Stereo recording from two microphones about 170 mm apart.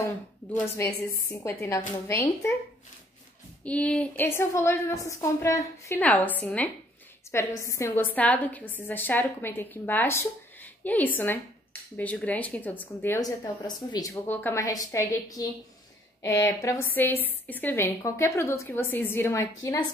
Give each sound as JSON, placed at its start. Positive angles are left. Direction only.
{"t": 0.6, "sound": "a woman's voice", "side_deg": 15}
{"t": 3.6, "sound": "a woman's voice", "side_deg": 10}